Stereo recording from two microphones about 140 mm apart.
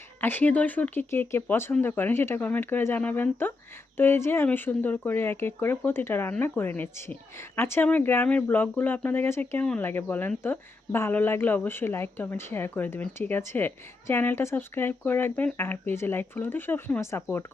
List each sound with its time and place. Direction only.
0.2 s speech: 15° left (ahead or behind)